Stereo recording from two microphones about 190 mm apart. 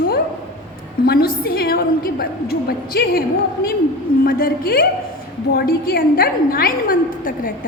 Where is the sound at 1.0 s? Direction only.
55° left (ahead or behind).